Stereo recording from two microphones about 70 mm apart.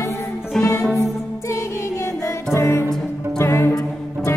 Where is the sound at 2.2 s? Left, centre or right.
Left.